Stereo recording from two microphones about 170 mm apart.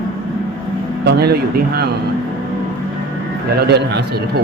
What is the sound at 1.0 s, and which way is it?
Speech, 70° right (ahead or behind).